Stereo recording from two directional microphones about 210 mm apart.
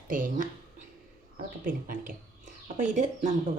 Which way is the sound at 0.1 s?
40° right (ahead or behind).